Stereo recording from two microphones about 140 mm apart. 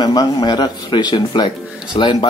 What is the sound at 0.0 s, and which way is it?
A man's voice, 30° left (ahead or behind).